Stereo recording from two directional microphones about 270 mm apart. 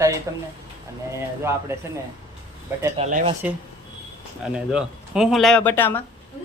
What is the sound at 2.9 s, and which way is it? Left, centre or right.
Speech, right.